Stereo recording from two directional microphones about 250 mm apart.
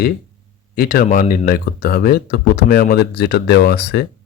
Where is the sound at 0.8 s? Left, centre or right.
Left.